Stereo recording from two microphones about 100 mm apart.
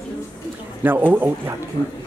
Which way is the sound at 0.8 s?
20° right (ahead or behind).